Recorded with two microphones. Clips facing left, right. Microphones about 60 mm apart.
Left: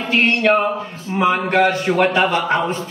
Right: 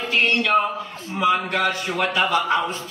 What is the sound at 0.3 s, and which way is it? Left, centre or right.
A man's voice, left.